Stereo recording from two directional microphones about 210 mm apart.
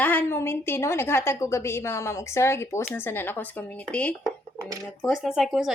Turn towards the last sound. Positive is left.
turn(degrees=0)  # may be behind; listen again after turning